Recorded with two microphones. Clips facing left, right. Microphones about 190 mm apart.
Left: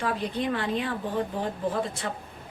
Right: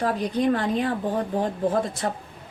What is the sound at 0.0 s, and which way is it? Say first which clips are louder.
Speech: right 5 dB; 45° right (ahead or behind).